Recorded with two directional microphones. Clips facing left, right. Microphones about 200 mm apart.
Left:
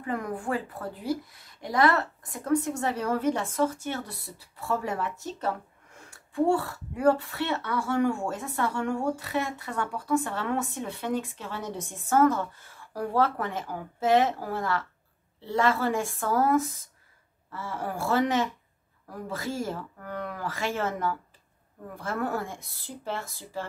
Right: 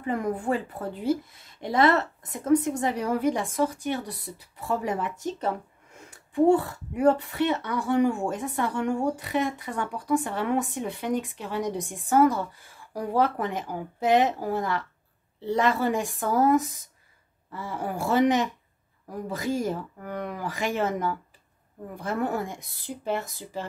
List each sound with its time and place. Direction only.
0.0 s a woman's voice: 25° right (ahead or behind)